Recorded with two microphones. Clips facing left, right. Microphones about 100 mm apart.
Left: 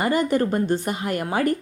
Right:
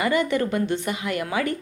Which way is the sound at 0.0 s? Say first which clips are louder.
Left 1 dB; 40° left (ahead or behind).